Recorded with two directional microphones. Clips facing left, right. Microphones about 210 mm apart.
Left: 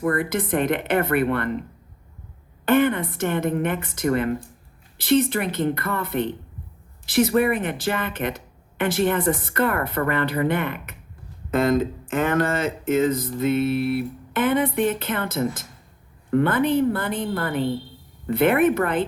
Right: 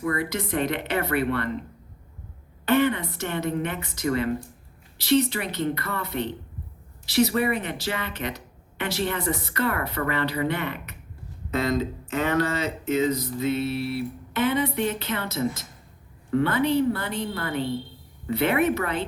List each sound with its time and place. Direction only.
0.0 s speech: 50° left (ahead or behind)
2.6 s speech: 50° left (ahead or behind)